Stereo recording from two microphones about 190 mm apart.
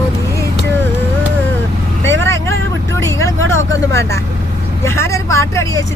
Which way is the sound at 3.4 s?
90° right.